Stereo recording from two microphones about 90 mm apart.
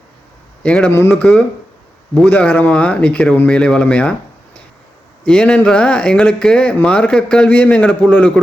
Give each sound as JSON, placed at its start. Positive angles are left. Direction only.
{"t": 0.6, "sound": "a man's voice", "side_deg": 15}
{"t": 0.9, "sound": "speech", "side_deg": 25}
{"t": 1.1, "sound": "speech", "side_deg": 10}
{"t": 5.2, "sound": "speech", "side_deg": 10}